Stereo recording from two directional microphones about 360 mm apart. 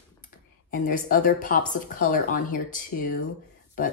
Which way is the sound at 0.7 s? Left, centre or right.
Left.